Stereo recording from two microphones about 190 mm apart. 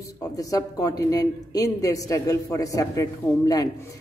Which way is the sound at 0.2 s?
20° left (ahead or behind).